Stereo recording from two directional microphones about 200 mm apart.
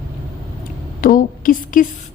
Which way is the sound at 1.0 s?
45° left (ahead or behind).